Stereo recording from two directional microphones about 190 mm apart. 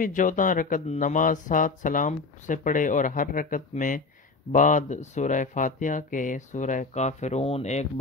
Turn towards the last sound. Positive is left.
turn(degrees=35)  # may be behind; listen again after turning